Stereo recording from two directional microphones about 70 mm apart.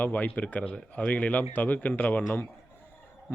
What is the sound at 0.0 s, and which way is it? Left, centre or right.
Speech, left.